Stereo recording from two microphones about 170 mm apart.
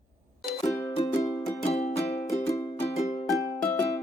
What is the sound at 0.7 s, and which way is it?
Music, 15° left (ahead or behind).